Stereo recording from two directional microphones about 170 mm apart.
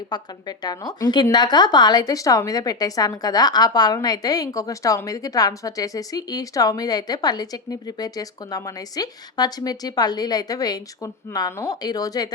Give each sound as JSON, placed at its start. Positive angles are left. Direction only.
{"t": 0.1, "sound": "a woman's voice", "side_deg": 25}